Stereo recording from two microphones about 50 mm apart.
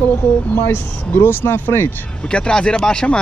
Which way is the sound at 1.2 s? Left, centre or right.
Left.